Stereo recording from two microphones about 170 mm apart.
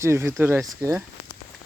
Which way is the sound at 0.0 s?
15° right (ahead or behind).